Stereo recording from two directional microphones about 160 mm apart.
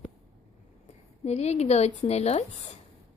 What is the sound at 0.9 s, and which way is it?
Speech, 40° left (ahead or behind).